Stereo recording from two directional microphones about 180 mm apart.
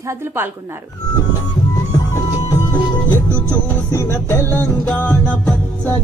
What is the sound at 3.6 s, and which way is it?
Music, 10° left (ahead or behind).